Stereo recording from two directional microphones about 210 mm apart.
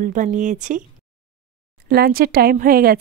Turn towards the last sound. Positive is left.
turn(degrees=-45)  # may be behind; listen again after turning